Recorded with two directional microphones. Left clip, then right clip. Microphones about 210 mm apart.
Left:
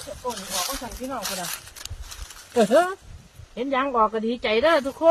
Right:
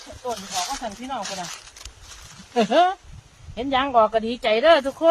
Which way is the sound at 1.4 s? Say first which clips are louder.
Left 1 dB; 55° left (ahead or behind).